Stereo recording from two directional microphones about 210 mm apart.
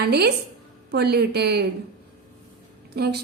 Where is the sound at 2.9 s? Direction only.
50° right (ahead or behind).